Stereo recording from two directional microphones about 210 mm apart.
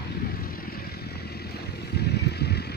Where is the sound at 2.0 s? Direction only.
50° left (ahead or behind).